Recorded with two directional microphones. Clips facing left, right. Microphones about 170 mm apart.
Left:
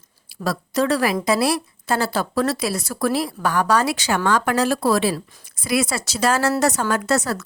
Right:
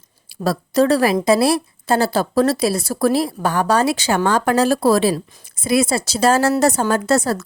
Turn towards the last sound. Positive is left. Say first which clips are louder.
# right 4 dB
turn(degrees=-30)  # may be behind; listen again after turning